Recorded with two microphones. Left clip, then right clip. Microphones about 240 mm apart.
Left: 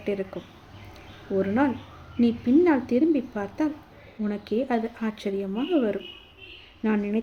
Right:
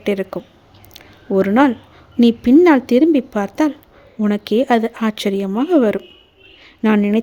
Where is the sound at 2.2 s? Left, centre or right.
Right.